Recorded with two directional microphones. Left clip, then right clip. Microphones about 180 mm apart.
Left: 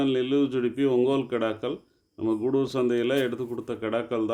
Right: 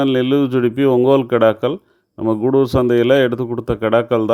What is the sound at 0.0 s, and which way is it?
A man's voice, 45° right (ahead or behind).